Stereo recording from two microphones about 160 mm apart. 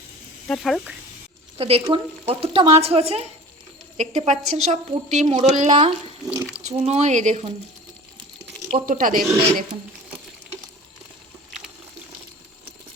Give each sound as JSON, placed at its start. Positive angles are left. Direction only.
{"t": 0.4, "sound": "speech", "side_deg": 5}
{"t": 1.5, "sound": "a woman's voice", "side_deg": -35}
{"t": 8.7, "sound": "speech", "side_deg": -60}